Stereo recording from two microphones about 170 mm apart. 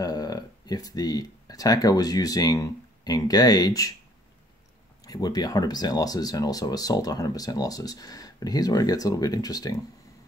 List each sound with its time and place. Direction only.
0.0 s speech: 20° left (ahead or behind)
5.0 s speech: 20° left (ahead or behind)